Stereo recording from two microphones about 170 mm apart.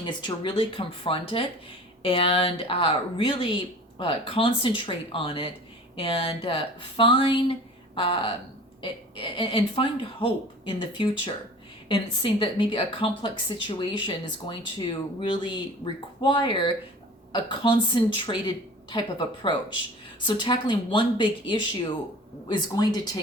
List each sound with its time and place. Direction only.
0.0 s a woman's voice: 30° left (ahead or behind)